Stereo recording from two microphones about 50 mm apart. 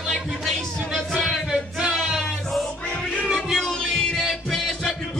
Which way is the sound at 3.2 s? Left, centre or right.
Centre.